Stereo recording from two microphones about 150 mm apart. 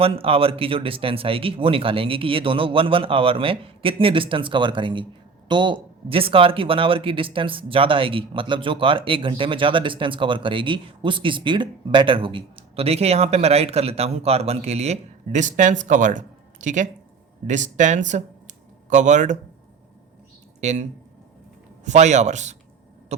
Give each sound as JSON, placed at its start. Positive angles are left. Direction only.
{"t": 0.0, "sound": "speech", "side_deg": -40}
{"t": 20.6, "sound": "speech", "side_deg": -50}
{"t": 21.8, "sound": "speech", "side_deg": -50}